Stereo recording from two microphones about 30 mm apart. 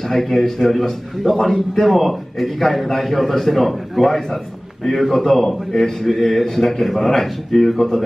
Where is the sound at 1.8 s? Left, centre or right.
Centre.